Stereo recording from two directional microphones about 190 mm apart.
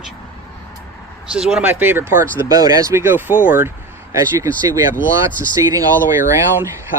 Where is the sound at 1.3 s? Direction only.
5° right (ahead or behind).